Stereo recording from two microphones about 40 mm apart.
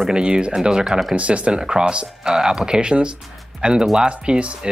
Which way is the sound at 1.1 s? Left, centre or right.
Right.